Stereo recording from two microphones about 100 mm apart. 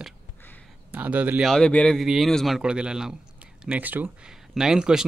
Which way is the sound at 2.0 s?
Centre (ahead or behind).